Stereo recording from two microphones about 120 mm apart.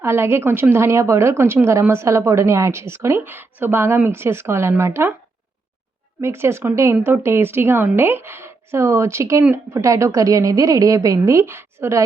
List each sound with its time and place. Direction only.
0.0 s a woman's voice: 20° right (ahead or behind)
6.2 s a woman's voice: 20° right (ahead or behind)